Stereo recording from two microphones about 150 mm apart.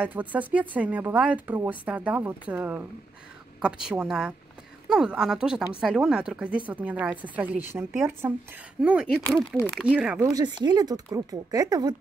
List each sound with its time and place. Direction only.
0.0 s speech: 10° right (ahead or behind)
9.1 s speech: 5° left (ahead or behind)
9.7 s speech: 5° right (ahead or behind)
10.2 s speech: 25° right (ahead or behind)